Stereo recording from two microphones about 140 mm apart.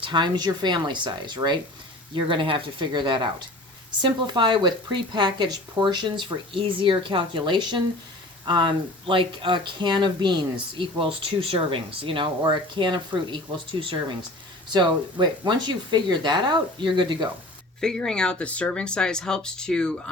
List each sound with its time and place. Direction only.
0.0 s speech: 30° right (ahead or behind)
17.7 s speech: 5° left (ahead or behind)